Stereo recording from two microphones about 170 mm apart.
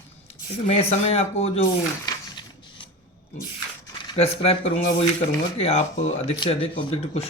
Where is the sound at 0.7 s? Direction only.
35° left (ahead or behind).